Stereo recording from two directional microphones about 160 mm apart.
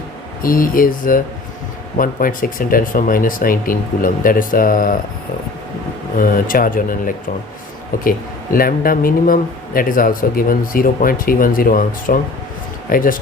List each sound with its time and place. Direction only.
0.4 s speech: 60° left (ahead or behind)
6.1 s speech: 60° left (ahead or behind)